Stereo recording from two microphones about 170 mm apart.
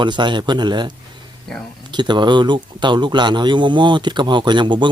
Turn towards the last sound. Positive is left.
turn(degrees=-25)  # may be behind; listen again after turning